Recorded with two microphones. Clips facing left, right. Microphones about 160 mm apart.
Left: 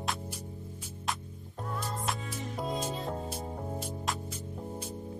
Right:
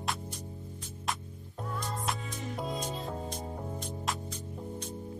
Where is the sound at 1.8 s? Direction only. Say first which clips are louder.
Even; centre (ahead or behind).